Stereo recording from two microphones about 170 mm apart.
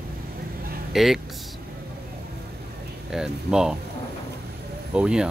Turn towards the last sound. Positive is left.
turn(degrees=-5)  # may be behind; listen again after turning